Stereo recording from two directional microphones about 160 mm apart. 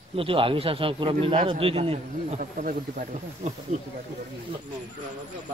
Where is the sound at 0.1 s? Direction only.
35° right (ahead or behind).